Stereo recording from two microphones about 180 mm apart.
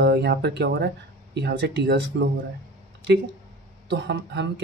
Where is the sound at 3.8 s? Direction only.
75° right (ahead or behind).